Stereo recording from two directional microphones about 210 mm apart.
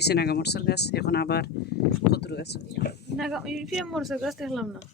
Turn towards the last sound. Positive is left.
turn(degrees=0)  # may be behind; listen again after turning